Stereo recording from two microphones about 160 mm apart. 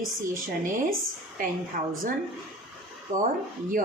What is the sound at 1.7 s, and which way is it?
Speech, 55° right (ahead or behind).